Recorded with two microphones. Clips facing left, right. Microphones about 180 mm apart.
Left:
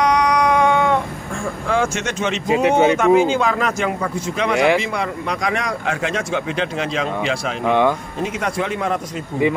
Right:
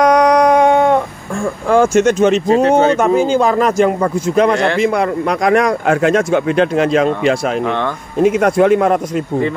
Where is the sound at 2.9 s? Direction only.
40° right (ahead or behind).